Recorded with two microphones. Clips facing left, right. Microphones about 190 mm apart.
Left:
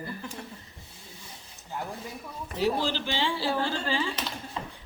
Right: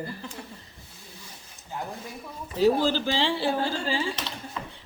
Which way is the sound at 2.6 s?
40° right (ahead or behind).